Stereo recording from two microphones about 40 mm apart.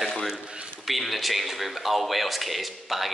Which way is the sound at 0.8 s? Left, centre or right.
Centre.